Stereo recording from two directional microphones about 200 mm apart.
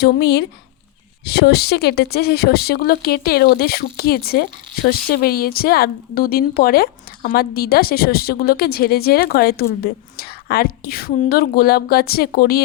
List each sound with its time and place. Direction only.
0.0 s a woman's voice: 55° left (ahead or behind)